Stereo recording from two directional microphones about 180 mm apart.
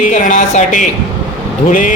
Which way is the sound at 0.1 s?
45° left (ahead or behind).